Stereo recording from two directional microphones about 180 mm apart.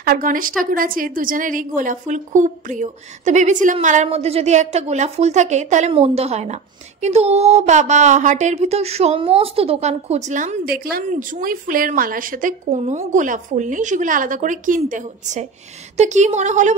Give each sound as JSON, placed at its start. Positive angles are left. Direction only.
{"t": 0.0, "sound": "a woman's voice", "side_deg": -55}